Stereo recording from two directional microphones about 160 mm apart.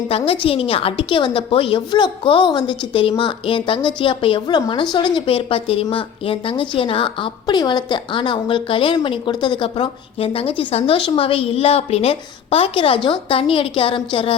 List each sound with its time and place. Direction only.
0.3 s a woman's voice: 35° left (ahead or behind)